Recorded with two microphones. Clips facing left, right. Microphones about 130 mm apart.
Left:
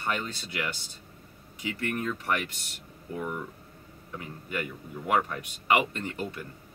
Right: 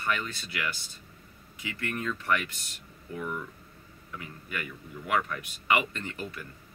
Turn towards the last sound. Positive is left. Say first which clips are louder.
# left 3 dB
turn(degrees=20)  # may be behind; listen again after turning